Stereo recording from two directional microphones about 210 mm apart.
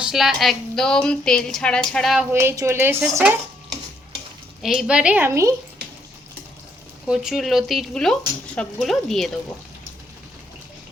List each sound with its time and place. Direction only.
0.0 s speech: centre (ahead or behind)
2.3 s speech: 10° right (ahead or behind)
4.6 s speech: centre (ahead or behind)
7.1 s speech: 5° right (ahead or behind)